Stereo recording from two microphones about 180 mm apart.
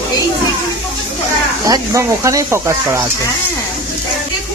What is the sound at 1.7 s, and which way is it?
Speech, 20° right (ahead or behind).